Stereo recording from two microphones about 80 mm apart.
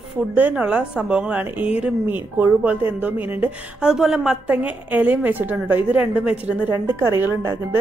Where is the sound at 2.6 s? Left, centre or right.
Right.